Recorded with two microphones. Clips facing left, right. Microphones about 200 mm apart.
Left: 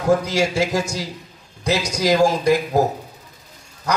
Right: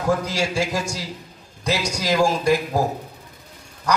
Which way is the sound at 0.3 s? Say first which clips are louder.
Left 4 dB; 20° left (ahead or behind).